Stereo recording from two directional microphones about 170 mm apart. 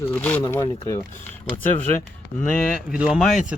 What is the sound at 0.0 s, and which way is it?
Speech, 10° left (ahead or behind).